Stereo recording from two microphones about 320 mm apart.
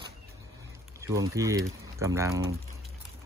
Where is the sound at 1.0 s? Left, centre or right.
Centre.